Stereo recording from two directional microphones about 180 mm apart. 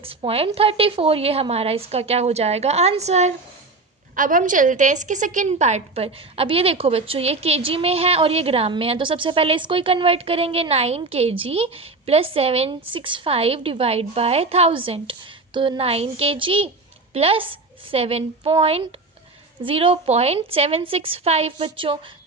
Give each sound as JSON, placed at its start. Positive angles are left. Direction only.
{"t": 0.0, "sound": "a woman's voice", "side_deg": -30}